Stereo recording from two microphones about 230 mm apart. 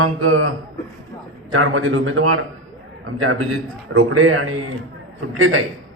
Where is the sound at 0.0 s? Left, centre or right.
Right.